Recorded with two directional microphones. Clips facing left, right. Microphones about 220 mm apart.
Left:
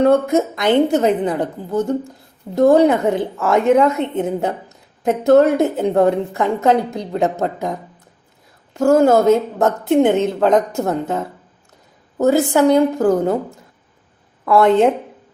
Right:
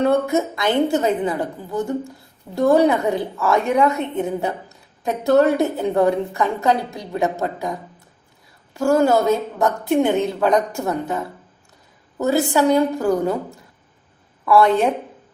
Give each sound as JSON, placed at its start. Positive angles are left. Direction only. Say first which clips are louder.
{"t": 0.0, "sound": "a woman's voice", "louder": "left 4 dB", "side_deg": 20}